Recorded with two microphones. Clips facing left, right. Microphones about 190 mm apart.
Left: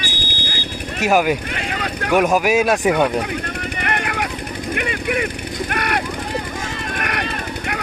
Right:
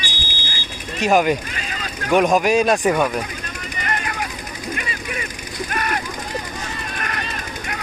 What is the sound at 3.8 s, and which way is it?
Vehicle, 65° left (ahead or behind).